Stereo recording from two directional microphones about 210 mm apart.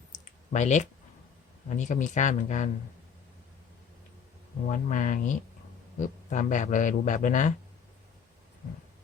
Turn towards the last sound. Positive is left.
turn(degrees=35)  # may be behind; listen again after turning